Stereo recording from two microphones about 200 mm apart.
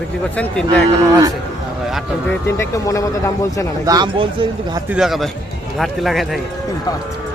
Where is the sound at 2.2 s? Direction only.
15° left (ahead or behind).